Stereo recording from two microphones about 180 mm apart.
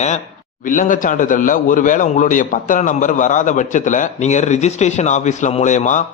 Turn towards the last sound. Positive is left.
turn(degrees=45)  # may be behind; listen again after turning